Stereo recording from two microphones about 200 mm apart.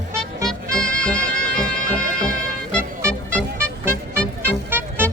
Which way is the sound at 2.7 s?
5° left (ahead or behind).